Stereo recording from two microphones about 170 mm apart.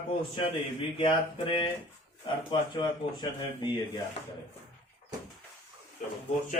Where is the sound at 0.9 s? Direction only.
30° left (ahead or behind).